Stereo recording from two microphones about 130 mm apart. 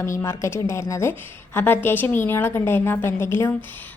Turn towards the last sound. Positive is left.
turn(degrees=20)  # may be behind; listen again after turning